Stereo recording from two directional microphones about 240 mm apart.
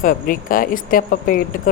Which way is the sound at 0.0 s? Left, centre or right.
Left.